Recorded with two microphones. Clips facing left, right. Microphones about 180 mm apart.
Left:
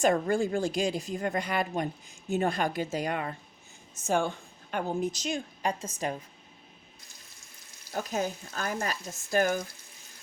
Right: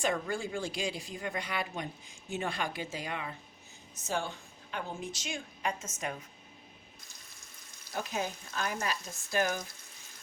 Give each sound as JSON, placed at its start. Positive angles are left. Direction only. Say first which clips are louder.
{"t": 0.0, "sound": "a woman's voice", "louder": "left 8 dB", "side_deg": 45}
{"t": 7.9, "sound": "speech", "louder": "left 4 dB", "side_deg": 45}